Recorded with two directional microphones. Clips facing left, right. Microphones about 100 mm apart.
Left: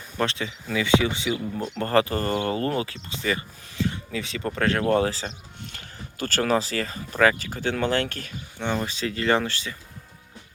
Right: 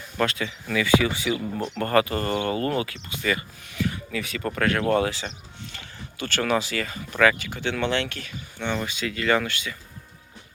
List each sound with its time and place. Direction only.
0.2 s speech: 25° left (ahead or behind); by 8.3 s 40° left (ahead or behind)
8.5 s speech: 30° left (ahead or behind)